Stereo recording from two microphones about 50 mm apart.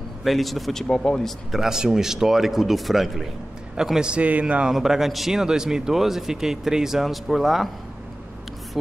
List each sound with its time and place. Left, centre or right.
0.2 s a man's voice: centre
0.8 s speech: centre
1.5 s a man's voice: centre
4.1 s a man's voice: right
4.6 s a man's voice: centre